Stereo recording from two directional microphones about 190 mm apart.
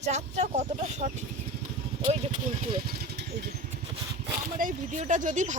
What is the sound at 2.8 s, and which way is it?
Vehicle, 55° right (ahead or behind).